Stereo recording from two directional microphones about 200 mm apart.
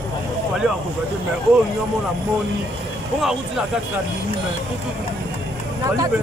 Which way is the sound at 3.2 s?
Centre (ahead or behind).